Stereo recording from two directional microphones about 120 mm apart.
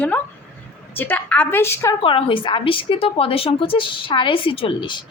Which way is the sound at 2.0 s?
45° left (ahead or behind).